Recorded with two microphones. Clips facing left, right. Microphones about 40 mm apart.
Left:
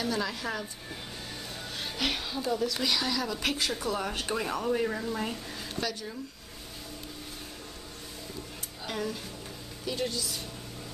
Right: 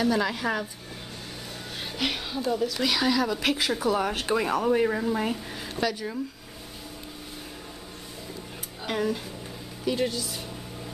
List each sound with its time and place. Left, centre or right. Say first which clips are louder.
0.0 s speech: right 6 dB; centre
1.8 s speech: right 2 dB; centre
3.9 s speech: right 6 dB; right
8.8 s speech: right 6 dB; centre